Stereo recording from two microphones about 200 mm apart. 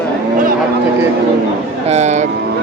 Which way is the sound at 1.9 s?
35° right (ahead or behind).